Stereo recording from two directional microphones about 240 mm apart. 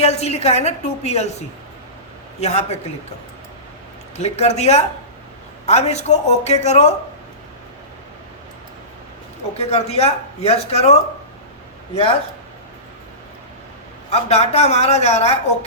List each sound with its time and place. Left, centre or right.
0.0 s speech: left
2.4 s speech: left
4.2 s speech: left
9.6 s speech: left
14.1 s speech: left